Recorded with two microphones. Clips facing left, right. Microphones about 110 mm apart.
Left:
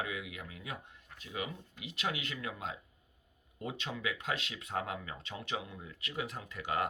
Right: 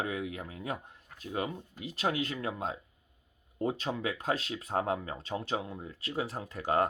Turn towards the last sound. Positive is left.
turn(degrees=-40)  # may be behind; listen again after turning